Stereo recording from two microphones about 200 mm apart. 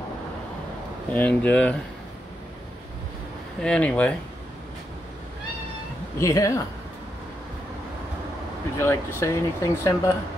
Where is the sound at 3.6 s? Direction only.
5° left (ahead or behind).